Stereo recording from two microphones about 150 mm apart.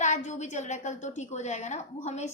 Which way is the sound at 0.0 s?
50° left (ahead or behind).